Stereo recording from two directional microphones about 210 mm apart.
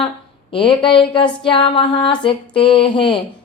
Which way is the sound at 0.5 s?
25° left (ahead or behind).